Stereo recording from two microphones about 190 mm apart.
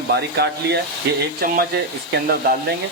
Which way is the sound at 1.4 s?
50° right (ahead or behind).